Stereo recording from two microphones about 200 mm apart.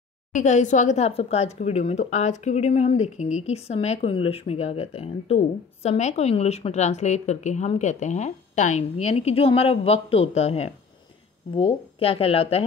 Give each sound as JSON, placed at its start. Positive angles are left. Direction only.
{"t": 0.3, "sound": "speech", "side_deg": 35}